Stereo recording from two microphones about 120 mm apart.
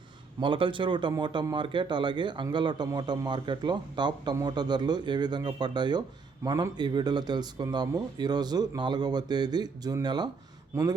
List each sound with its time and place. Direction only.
0.3 s speech: 45° right (ahead or behind)
10.7 s speech: 25° right (ahead or behind)